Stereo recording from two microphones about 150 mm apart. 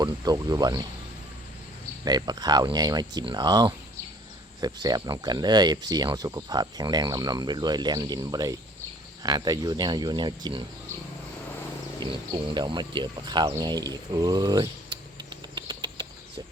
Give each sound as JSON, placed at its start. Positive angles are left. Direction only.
{"t": 0.0, "sound": "speech", "side_deg": -25}
{"t": 2.0, "sound": "speech", "side_deg": -25}
{"t": 11.9, "sound": "speech", "side_deg": -30}